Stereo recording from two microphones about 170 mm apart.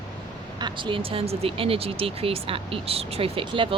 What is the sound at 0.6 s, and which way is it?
Speech, 30° right (ahead or behind).